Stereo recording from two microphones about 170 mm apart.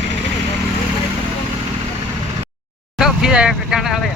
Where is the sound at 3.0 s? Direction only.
5° right (ahead or behind).